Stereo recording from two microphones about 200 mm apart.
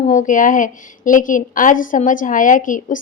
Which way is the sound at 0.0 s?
40° left (ahead or behind).